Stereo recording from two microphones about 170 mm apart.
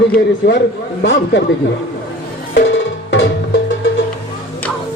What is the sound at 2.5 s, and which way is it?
Music, 90° left.